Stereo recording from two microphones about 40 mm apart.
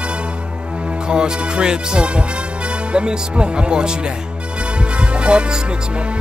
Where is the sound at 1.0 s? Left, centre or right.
Right.